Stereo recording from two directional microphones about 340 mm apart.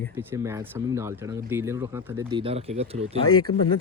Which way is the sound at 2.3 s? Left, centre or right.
Centre.